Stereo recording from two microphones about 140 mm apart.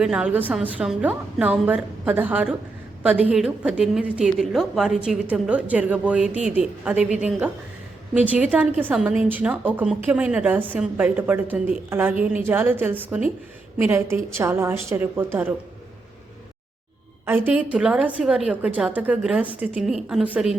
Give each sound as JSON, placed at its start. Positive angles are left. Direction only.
{"t": 0.0, "sound": "a woman's voice", "side_deg": -5}
{"t": 17.2, "sound": "a woman's voice", "side_deg": -15}